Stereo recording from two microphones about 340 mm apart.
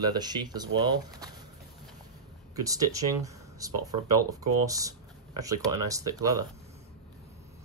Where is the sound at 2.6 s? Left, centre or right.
Centre.